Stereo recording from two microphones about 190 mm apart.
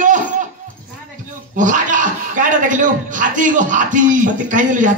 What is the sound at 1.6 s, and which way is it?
A man's voice, 40° right (ahead or behind).